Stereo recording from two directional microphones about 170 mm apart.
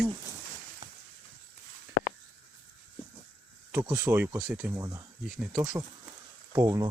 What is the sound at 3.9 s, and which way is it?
Speech, 10° right (ahead or behind).